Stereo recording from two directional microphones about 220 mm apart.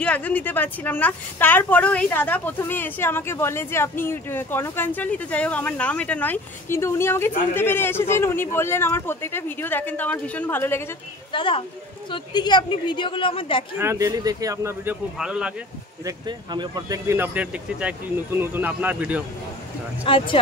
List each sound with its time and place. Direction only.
0.0 s speech: 5° left (ahead or behind)
11.3 s a woman's voice: 25° left (ahead or behind)
13.7 s speech: 15° right (ahead or behind)
16.1 s speech: 20° right (ahead or behind)
20.1 s a woman's voice: 25° left (ahead or behind)